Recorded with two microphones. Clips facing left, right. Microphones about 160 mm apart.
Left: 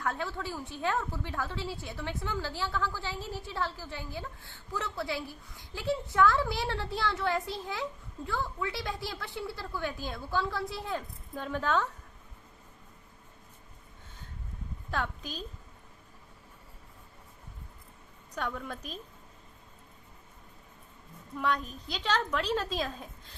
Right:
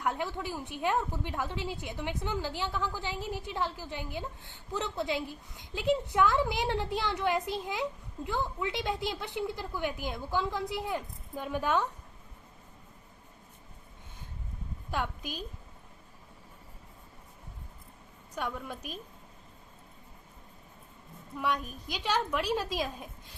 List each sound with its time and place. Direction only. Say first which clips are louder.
0.0 s a woman's voice: right 1 dB; 15° right (ahead or behind)
14.8 s a woman's voice: even; 10° right (ahead or behind)
18.3 s a woman's voice: even; 10° right (ahead or behind)
21.3 s a woman's voice: left 1 dB; 10° right (ahead or behind)